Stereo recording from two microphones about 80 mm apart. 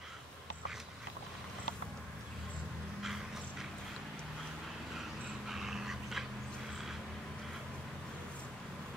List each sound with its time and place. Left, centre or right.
5.5 s dog: centre